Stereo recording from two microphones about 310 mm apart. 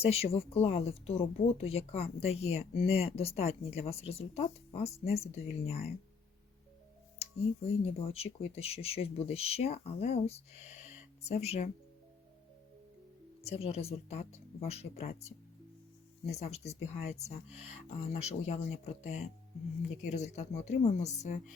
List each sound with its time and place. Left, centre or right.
0.0 s speech: centre
7.9 s speech: centre
13.4 s speech: centre